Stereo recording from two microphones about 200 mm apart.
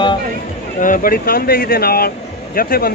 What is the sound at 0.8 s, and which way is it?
Speech, 45° left (ahead or behind).